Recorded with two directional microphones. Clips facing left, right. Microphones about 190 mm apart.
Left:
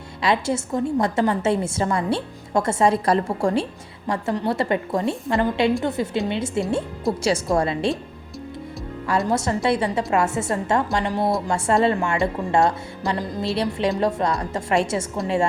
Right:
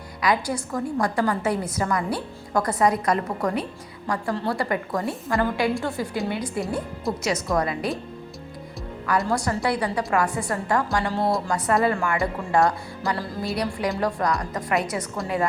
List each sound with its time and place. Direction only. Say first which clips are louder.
0.2 s a woman's voice: left 2 dB; 25° left (ahead or behind)
9.0 s a woman's voice: left 2 dB; 25° left (ahead or behind)